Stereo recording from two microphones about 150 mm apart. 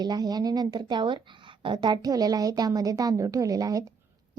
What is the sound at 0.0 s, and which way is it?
A woman's voice, 25° right (ahead or behind).